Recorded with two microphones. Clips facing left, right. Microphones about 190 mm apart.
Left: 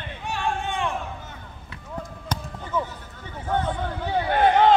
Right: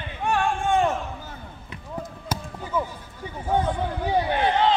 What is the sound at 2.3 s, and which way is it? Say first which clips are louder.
Basketball bounce: even; 10° right (ahead or behind).